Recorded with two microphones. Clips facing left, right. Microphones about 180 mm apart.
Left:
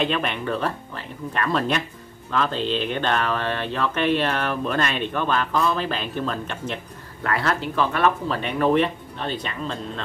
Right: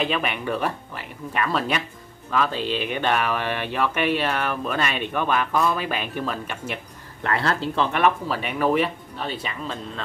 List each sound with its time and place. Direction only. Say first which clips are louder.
0.0 s speech: left 1 dB; 5° right (ahead or behind)
7.2 s speech: even; 30° right (ahead or behind)
8.0 s speech: even; 10° right (ahead or behind)